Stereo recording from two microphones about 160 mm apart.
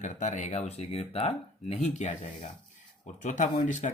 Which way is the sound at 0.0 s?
50° left (ahead or behind).